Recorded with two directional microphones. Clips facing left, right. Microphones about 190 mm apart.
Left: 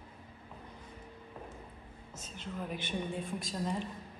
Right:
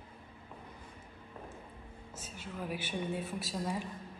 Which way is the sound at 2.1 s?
10° right (ahead or behind).